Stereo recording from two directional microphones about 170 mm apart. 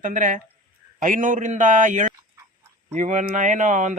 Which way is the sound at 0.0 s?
50° right (ahead or behind).